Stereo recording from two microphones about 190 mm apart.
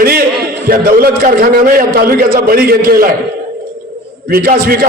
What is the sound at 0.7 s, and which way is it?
A man's voice, 50° right (ahead or behind).